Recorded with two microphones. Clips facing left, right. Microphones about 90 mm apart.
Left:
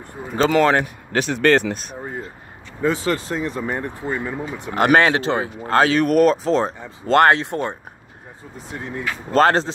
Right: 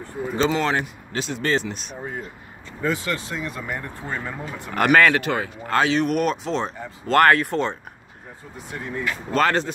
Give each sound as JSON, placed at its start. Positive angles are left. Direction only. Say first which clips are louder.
{"t": 0.4, "sound": "speech", "louder": "left 6 dB", "side_deg": 55}
{"t": 2.9, "sound": "speech", "louder": "left 4 dB", "side_deg": 35}
{"t": 4.1, "sound": "speech", "louder": "left 4 dB", "side_deg": 15}
{"t": 5.8, "sound": "speech", "louder": "left 5 dB", "side_deg": 45}
{"t": 7.2, "sound": "speech", "louder": "left 1 dB", "side_deg": 25}
{"t": 9.3, "sound": "speech", "louder": "left 5 dB", "side_deg": 35}